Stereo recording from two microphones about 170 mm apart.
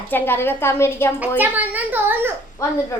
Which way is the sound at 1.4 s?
10° right (ahead or behind).